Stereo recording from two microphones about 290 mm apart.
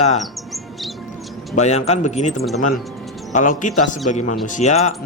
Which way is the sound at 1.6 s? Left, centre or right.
Left.